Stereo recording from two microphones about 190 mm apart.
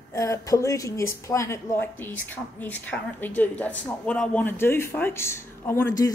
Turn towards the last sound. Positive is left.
turn(degrees=15)  # may be behind; listen again after turning